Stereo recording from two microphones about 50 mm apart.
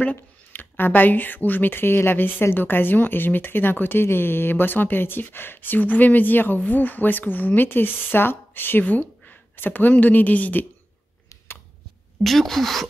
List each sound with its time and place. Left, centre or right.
0.0 s a woman's voice: left
12.2 s speech: centre